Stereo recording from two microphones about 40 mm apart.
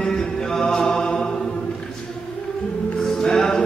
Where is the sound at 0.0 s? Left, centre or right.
Centre.